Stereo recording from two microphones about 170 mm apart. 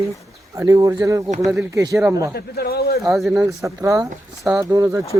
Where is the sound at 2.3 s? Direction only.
70° left (ahead or behind).